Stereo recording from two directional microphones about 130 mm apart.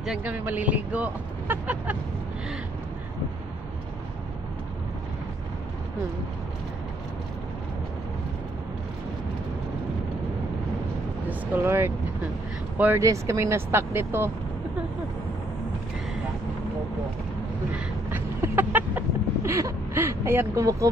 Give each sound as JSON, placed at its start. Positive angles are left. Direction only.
{"t": 0.0, "sound": "speech", "side_deg": -10}
{"t": 11.2, "sound": "speech", "side_deg": -15}
{"t": 13.0, "sound": "speech", "side_deg": -25}
{"t": 17.7, "sound": "a sound", "side_deg": -15}